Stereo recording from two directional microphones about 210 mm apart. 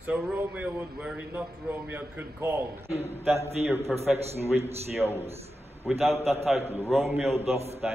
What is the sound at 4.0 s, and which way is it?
Speech, 30° right (ahead or behind).